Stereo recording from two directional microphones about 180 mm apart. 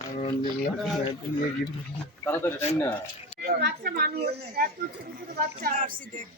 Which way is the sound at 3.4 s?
55° right (ahead or behind).